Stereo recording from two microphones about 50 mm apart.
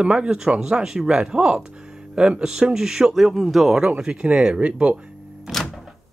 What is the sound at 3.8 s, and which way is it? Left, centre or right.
Speech, centre.